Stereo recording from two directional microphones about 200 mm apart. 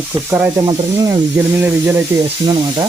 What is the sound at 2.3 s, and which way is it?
Sizzle, 20° right (ahead or behind).